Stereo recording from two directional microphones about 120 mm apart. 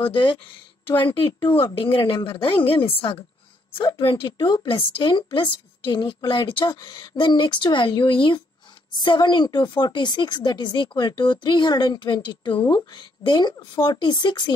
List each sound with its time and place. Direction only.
0.0 s a woman's voice: 45° left (ahead or behind)